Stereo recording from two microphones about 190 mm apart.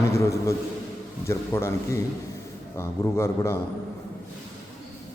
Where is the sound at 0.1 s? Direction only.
15° left (ahead or behind).